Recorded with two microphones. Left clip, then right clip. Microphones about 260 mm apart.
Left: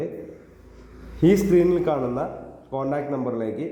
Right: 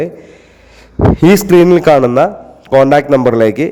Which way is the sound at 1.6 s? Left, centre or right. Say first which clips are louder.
Right 14 dB; right.